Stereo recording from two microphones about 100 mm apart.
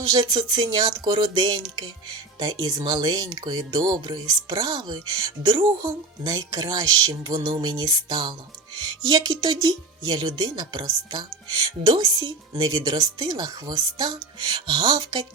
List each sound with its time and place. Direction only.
0.1 s speech: 45° right (ahead or behind)
12.7 s speech: 40° right (ahead or behind)